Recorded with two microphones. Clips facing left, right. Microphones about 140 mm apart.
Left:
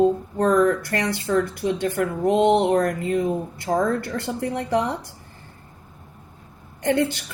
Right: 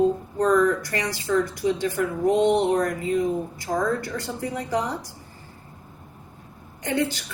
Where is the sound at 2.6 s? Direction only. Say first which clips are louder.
Left 2 dB; 55° left (ahead or behind).